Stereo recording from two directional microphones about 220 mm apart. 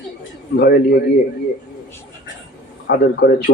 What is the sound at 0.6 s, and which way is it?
Speech, 45° left (ahead or behind).